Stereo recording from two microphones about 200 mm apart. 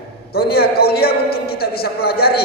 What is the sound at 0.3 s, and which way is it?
A man's voice, 50° left (ahead or behind).